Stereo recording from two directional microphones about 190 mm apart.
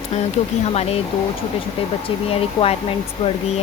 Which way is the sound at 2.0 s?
30° left (ahead or behind).